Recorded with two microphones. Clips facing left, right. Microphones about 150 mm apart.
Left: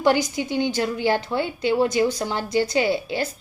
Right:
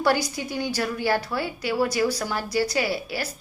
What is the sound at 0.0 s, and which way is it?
A woman's voice, 20° left (ahead or behind).